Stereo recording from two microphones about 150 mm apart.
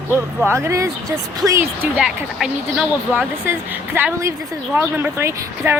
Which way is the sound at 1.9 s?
5° right (ahead or behind).